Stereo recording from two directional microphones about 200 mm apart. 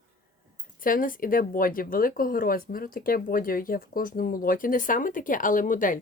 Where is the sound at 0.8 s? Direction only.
45° left (ahead or behind).